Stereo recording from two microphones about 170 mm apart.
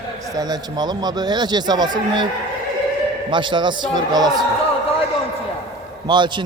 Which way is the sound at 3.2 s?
25° right (ahead or behind).